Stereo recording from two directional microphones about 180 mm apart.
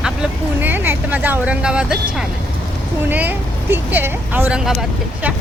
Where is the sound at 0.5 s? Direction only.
10° right (ahead or behind).